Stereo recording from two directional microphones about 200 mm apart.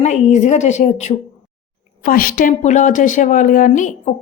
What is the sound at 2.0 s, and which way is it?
A woman's voice, 45° left (ahead or behind).